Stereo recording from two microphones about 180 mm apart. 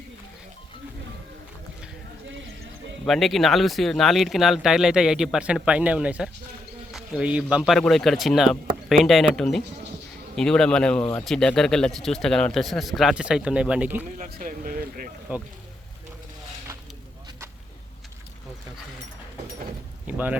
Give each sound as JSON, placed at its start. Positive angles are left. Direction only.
{"t": 3.1, "sound": "a man's voice", "side_deg": 0}
{"t": 14.3, "sound": "speech", "side_deg": -55}
{"t": 20.1, "sound": "speech", "side_deg": -10}